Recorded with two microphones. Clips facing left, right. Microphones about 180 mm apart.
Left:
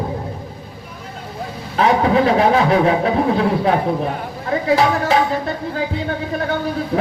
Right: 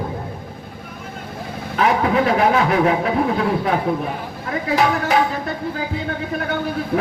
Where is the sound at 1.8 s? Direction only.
30° left (ahead or behind).